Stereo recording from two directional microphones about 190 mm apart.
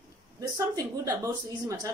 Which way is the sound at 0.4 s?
15° right (ahead or behind).